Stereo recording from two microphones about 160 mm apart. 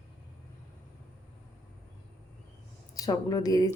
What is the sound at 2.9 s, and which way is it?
Speech, 25° left (ahead or behind).